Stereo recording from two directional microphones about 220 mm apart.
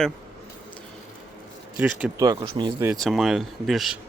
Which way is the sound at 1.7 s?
5° right (ahead or behind).